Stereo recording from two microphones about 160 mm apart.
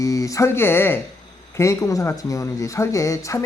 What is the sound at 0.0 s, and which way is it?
Speech, 20° left (ahead or behind).